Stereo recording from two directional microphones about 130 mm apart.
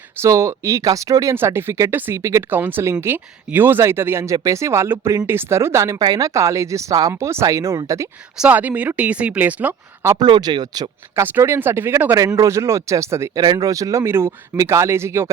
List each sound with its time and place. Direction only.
0.2 s speech: 25° right (ahead or behind)
8.4 s speech: 10° right (ahead or behind)
10.2 s speech: 35° right (ahead or behind)
11.1 s speech: 15° right (ahead or behind)